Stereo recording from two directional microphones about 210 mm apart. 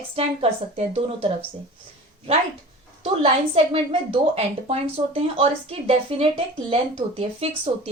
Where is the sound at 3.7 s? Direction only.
30° right (ahead or behind).